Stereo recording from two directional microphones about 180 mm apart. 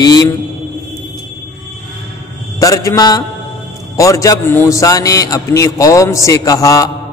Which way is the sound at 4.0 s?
20° left (ahead or behind).